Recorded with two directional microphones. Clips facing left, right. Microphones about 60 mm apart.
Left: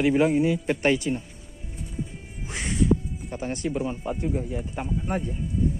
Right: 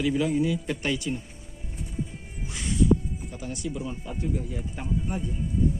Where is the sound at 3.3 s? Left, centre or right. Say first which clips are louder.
Left 7 dB; left.